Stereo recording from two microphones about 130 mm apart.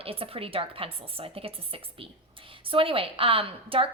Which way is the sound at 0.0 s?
45° right (ahead or behind).